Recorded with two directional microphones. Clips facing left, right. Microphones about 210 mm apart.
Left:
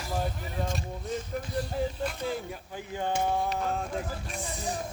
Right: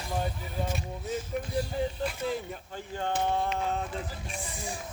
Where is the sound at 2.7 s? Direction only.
10° left (ahead or behind).